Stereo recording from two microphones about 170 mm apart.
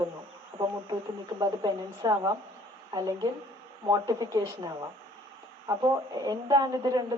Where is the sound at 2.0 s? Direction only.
20° right (ahead or behind).